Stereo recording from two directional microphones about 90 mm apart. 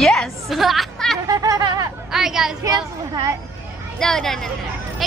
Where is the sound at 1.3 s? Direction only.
45° right (ahead or behind).